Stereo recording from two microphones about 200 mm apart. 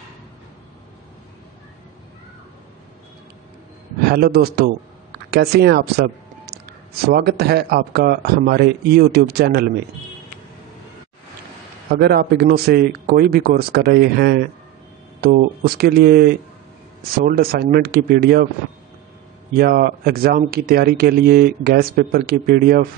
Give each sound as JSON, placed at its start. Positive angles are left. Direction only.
{"t": 4.0, "sound": "speech", "side_deg": -50}
{"t": 11.9, "sound": "speech", "side_deg": -50}
{"t": 19.5, "sound": "speech", "side_deg": -50}